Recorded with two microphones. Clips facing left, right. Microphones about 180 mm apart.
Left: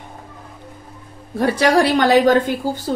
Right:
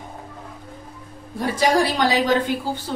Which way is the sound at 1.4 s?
70° left (ahead or behind).